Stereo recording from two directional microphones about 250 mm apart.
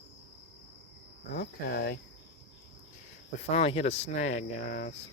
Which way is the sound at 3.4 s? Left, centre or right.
Left.